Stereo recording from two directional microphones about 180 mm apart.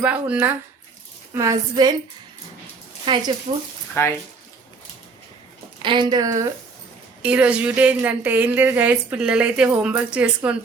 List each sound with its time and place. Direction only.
0.0 s a woman's voice: 5° right (ahead or behind); by 2.0 s 20° right (ahead or behind)
3.1 s a woman's voice: 25° right (ahead or behind)
4.0 s speech: 15° left (ahead or behind)
5.8 s a woman's voice: 25° right (ahead or behind)
7.2 s a woman's voice: 5° right (ahead or behind)